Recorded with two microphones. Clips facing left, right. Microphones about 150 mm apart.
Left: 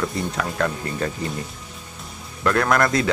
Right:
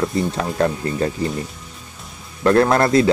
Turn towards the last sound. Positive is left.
turn(degrees=-30)  # may be behind; listen again after turning